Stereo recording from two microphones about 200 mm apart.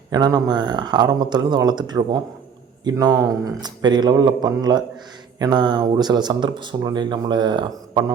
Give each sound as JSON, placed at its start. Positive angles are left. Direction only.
{"t": 0.1, "sound": "speech", "side_deg": -20}